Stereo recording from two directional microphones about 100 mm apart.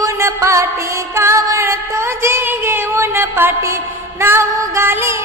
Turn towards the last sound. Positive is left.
turn(degrees=-25)  # may be behind; listen again after turning